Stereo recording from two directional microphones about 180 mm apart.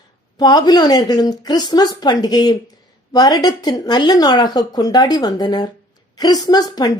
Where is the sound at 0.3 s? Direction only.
20° left (ahead or behind).